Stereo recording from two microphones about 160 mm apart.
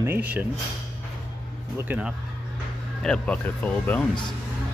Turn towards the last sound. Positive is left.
turn(degrees=10)  # may be behind; listen again after turning